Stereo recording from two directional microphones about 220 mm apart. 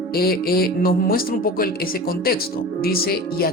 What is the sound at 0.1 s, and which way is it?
Speech, 45° left (ahead or behind).